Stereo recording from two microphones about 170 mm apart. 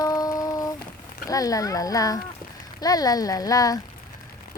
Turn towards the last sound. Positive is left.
turn(degrees=20)  # may be behind; listen again after turning